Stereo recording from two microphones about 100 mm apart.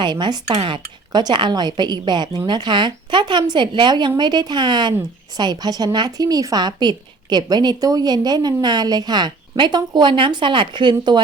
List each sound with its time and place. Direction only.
0.0 s a woman's voice: 50° right (ahead or behind)